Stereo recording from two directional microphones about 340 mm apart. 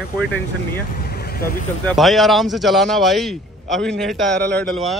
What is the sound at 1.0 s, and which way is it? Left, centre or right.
Vehicle, left.